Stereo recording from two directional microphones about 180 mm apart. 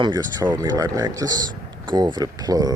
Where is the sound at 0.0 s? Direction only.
25° right (ahead or behind).